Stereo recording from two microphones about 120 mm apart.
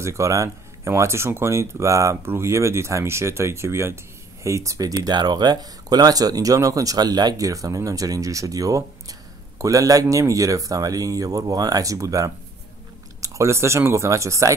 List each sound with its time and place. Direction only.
0.0 s speech: 25° right (ahead or behind)